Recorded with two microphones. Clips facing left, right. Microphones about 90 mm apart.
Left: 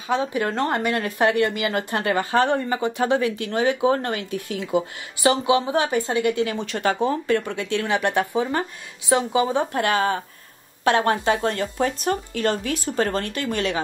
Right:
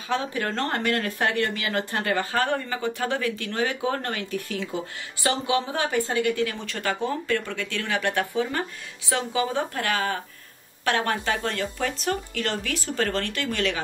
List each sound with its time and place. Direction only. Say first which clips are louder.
0.1 s speech: left 4 dB; 15° left (ahead or behind)